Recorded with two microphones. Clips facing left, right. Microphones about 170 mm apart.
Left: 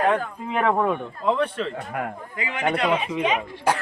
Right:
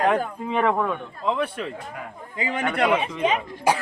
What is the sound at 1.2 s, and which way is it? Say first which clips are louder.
Speech: left 2 dB; centre (ahead or behind).